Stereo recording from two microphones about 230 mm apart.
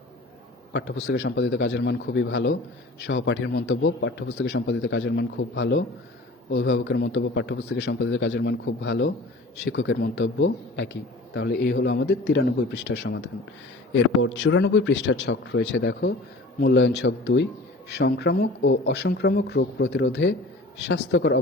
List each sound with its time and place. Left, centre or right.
0.7 s a man's voice: left